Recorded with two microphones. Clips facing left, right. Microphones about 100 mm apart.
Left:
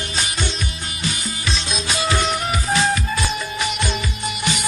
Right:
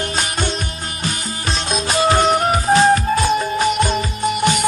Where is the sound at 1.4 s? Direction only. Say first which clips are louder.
Right 5 dB; 45° right (ahead or behind).